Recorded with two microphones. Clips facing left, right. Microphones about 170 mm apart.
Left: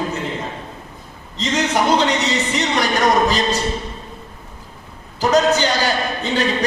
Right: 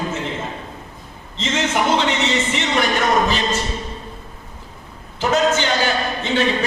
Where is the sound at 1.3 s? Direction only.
35° left (ahead or behind).